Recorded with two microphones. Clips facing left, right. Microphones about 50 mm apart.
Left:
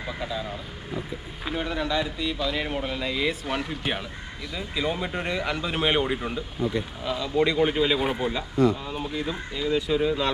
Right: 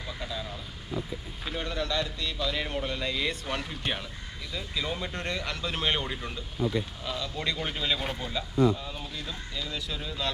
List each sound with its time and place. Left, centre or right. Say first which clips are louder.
0.2 s speech: left 5 dB; centre
1.5 s speech: left 4 dB; centre